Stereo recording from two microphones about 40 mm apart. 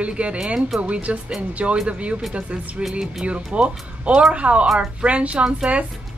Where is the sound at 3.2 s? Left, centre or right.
Right.